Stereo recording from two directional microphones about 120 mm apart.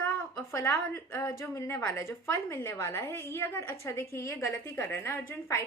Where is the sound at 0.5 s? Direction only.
20° left (ahead or behind).